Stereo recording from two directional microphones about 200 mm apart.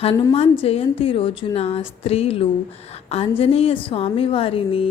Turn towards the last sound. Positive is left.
turn(degrees=25)  # may be behind; listen again after turning